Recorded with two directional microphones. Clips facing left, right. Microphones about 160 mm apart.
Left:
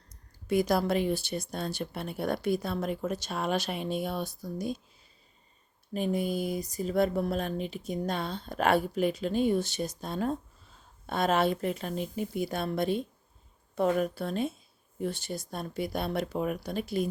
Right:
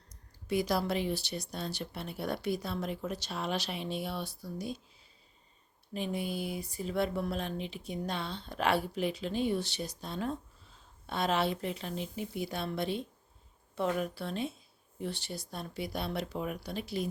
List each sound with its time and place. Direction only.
0.1 s speech: 50° left (ahead or behind)
5.9 s speech: 45° left (ahead or behind)